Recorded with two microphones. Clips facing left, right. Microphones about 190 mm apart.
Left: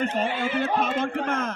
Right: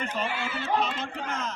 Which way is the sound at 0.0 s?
45° left (ahead or behind).